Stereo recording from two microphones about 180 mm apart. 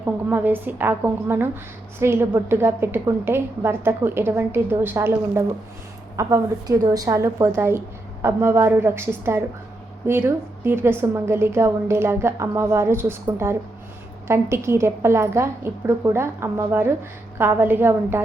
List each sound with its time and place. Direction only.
0.0 s a woman's voice: 10° right (ahead or behind)